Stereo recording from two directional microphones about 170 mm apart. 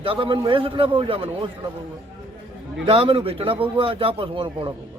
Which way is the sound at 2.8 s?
30° right (ahead or behind).